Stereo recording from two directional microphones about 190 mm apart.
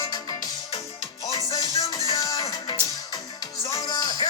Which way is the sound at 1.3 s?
20° left (ahead or behind).